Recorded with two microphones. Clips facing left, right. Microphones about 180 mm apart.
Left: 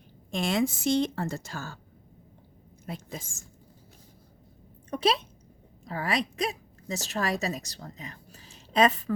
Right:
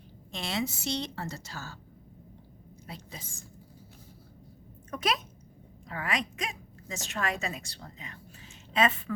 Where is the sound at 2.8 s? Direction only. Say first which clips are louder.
Left 7 dB; 45° left (ahead or behind).